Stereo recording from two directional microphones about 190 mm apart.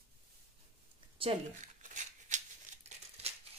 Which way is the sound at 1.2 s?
35° right (ahead or behind).